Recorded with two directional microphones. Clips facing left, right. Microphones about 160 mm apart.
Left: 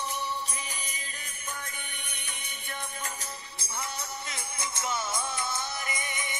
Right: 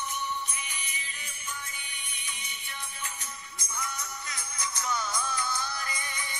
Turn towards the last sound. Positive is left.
turn(degrees=20)  # may be behind; listen again after turning